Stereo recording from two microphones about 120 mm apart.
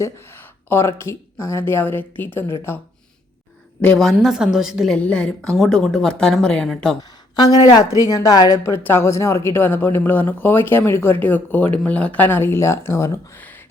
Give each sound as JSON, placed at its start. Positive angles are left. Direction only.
{"t": 0.0, "sound": "a woman's voice", "side_deg": 20}
{"t": 3.8, "sound": "a woman's voice", "side_deg": 5}
{"t": 7.3, "sound": "a woman's voice", "side_deg": 30}
{"t": 13.4, "sound": "a sound", "side_deg": 15}